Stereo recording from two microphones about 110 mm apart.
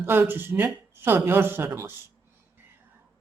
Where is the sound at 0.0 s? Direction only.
20° right (ahead or behind).